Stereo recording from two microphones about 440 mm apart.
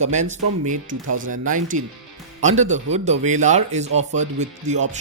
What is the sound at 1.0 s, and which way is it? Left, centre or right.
Speech, right.